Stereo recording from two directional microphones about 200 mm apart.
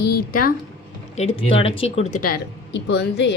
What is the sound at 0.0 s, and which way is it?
Speech, 45° left (ahead or behind).